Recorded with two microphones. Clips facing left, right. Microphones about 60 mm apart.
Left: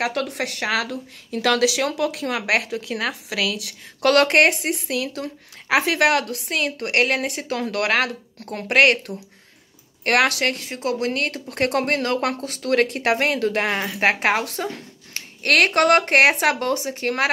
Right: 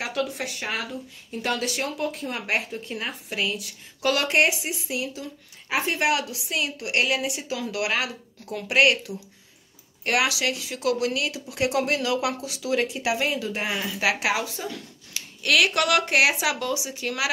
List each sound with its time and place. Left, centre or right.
0.0 s speech: left
14.7 s speech: left